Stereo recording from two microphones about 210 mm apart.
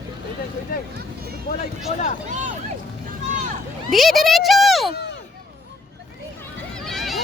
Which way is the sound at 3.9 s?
Centre (ahead or behind).